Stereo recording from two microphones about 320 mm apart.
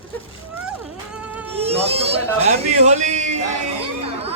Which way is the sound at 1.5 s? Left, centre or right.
Centre.